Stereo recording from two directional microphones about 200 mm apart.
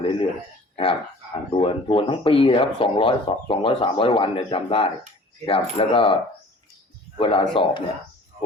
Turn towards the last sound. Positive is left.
turn(degrees=25)  # may be behind; listen again after turning